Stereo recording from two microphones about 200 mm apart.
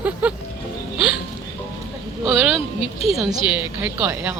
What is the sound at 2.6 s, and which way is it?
Speech, 30° left (ahead or behind).